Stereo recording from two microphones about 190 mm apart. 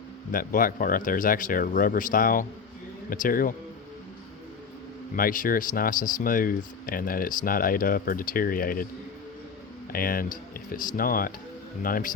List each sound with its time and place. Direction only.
0.3 s speech: 45° left (ahead or behind)
5.1 s speech: 45° left (ahead or behind)
9.9 s speech: 50° left (ahead or behind)